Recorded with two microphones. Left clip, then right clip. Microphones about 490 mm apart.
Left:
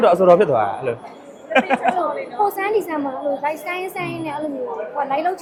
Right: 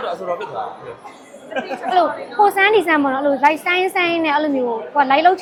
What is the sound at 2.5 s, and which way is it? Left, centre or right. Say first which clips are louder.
A woman's voice: right 7 dB; right.